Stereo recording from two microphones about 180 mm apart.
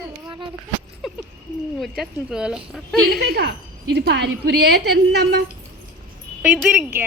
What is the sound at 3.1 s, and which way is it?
A woman's voice, 65° right (ahead or behind).